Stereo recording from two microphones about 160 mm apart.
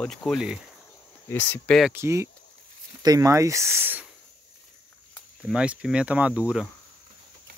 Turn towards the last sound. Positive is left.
turn(degrees=-5)  # may be behind; listen again after turning